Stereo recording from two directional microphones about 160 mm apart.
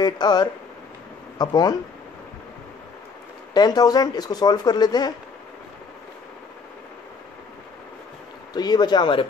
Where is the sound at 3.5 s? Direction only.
25° left (ahead or behind).